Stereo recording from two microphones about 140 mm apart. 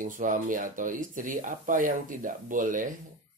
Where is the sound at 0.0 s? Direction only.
70° right (ahead or behind).